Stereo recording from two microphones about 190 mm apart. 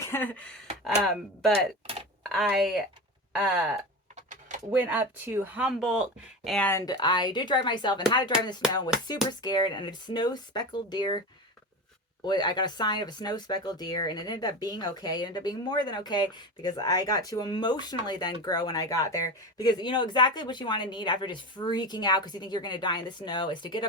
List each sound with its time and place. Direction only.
0.0 s speech: 10° left (ahead or behind)
4.3 s a sound: 40° right (ahead or behind)
4.7 s speech: 5° right (ahead or behind)
6.7 s speech: 20° left (ahead or behind)
9.4 s speech: 20° left (ahead or behind)
12.2 s speech: 20° left (ahead or behind)